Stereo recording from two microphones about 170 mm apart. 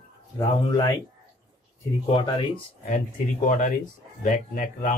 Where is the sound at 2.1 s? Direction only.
30° left (ahead or behind).